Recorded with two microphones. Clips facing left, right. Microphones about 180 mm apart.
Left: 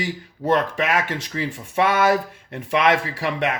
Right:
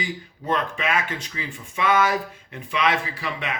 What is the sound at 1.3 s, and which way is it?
Speech, 60° left (ahead or behind).